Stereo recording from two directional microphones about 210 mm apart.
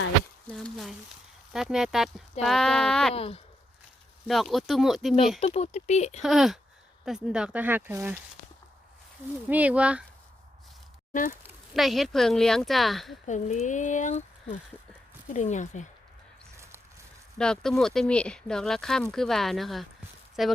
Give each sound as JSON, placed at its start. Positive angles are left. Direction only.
{"t": 0.5, "sound": "a sound", "side_deg": 0}
{"t": 1.5, "sound": "speech", "side_deg": 0}
{"t": 3.2, "sound": "speech", "side_deg": 25}
{"t": 4.3, "sound": "speech", "side_deg": 0}
{"t": 5.4, "sound": "speech", "side_deg": 30}
{"t": 6.2, "sound": "speech", "side_deg": 0}
{"t": 9.5, "sound": "speech", "side_deg": -5}
{"t": 11.1, "sound": "speech", "side_deg": 40}
{"t": 11.4, "sound": "speech", "side_deg": 0}
{"t": 13.2, "sound": "speech", "side_deg": 35}
{"t": 17.3, "sound": "speech", "side_deg": 5}